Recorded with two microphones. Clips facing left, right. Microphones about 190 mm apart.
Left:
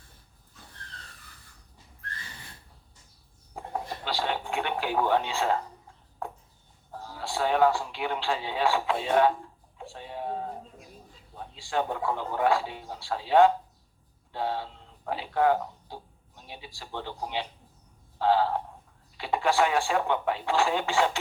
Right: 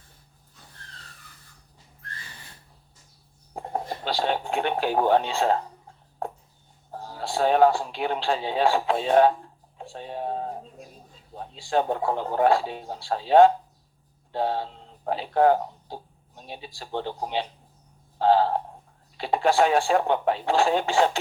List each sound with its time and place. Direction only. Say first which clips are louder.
3.5 s radio: right 4 dB; 35° right (ahead or behind)
6.9 s speech: right 4 dB; 35° right (ahead or behind)
9.7 s music: right 4 dB; 35° right (ahead or behind)
11.3 s speech: right 5 dB; 35° right (ahead or behind)
18.2 s frog: right 4 dB; 35° right (ahead or behind)
19.1 s speech: right 4 dB; 35° right (ahead or behind)